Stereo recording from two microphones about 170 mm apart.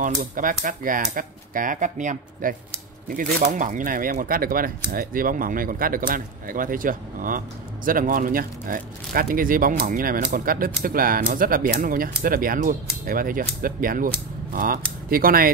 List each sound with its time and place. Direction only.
0.0 s speech: 55° right (ahead or behind)